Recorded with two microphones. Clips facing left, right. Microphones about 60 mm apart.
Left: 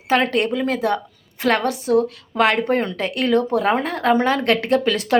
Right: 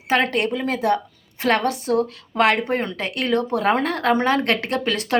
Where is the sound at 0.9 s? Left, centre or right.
Right.